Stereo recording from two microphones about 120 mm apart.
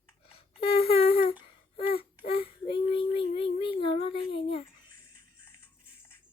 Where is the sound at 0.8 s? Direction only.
50° left (ahead or behind).